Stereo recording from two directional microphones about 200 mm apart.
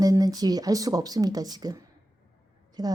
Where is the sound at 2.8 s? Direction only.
20° right (ahead or behind).